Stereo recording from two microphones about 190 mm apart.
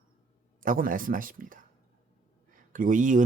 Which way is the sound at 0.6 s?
45° right (ahead or behind).